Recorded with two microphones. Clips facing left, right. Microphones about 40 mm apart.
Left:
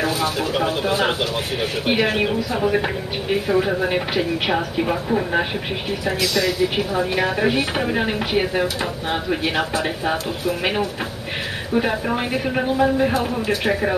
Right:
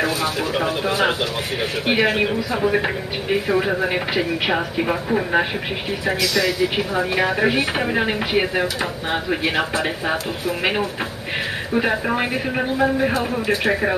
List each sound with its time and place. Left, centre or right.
0.0 s speech: centre
1.9 s speech: right
2.1 s speech: centre
9.6 s speech: right
11.7 s speech: right
13.5 s speech: right